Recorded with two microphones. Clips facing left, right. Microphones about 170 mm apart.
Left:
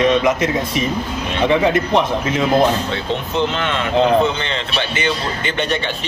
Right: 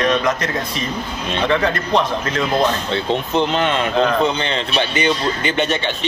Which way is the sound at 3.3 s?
20° right (ahead or behind).